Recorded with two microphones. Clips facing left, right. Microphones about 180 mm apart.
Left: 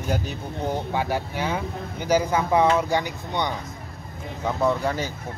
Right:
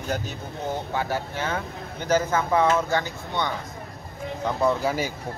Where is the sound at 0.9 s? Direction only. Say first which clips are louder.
Left 2 dB; 15° left (ahead or behind).